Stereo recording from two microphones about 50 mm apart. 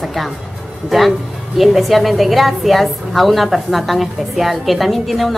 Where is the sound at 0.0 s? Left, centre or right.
Centre.